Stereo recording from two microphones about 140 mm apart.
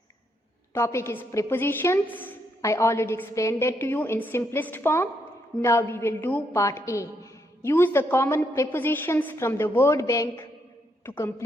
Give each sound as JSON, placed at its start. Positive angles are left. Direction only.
{"t": 0.7, "sound": "a woman's voice", "side_deg": 20}